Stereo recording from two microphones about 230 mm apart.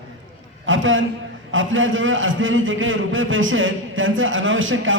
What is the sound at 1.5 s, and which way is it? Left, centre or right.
A man's voice, right.